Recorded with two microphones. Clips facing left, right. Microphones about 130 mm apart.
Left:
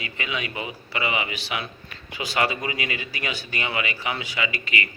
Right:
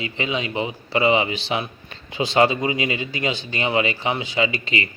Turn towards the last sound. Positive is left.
turn(degrees=-30)  # may be behind; listen again after turning